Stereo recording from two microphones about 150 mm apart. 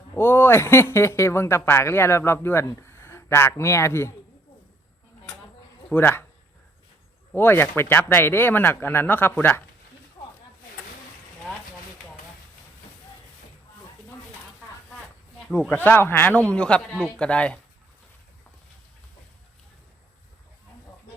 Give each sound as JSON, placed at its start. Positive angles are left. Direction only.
{"t": 0.2, "sound": "speech", "side_deg": 15}
{"t": 5.9, "sound": "speech", "side_deg": 15}
{"t": 7.3, "sound": "speech", "side_deg": 15}
{"t": 15.4, "sound": "speech", "side_deg": 5}